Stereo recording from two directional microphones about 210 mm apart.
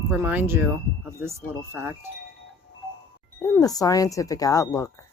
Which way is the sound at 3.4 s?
15° left (ahead or behind).